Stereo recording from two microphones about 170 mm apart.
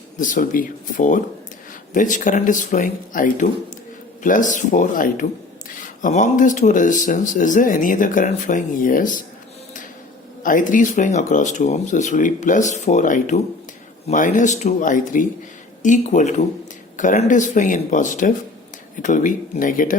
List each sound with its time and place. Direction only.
0.2 s speech: 50° left (ahead or behind)
10.4 s speech: 50° left (ahead or behind)